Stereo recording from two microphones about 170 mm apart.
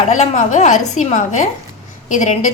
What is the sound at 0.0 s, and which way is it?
Speech, 45° left (ahead or behind).